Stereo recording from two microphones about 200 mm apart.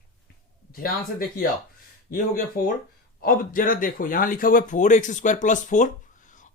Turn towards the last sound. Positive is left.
turn(degrees=40)  # may be behind; listen again after turning